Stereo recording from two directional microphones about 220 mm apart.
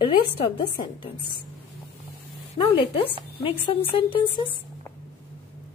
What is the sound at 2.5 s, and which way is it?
A woman's voice, 25° left (ahead or behind).